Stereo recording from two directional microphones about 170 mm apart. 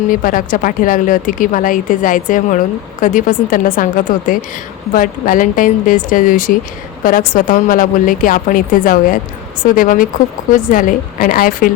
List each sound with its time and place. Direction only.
0.1 s a woman's voice: 55° left (ahead or behind)